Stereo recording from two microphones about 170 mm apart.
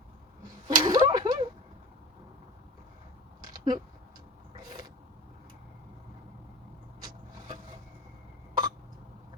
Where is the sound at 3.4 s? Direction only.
25° right (ahead or behind).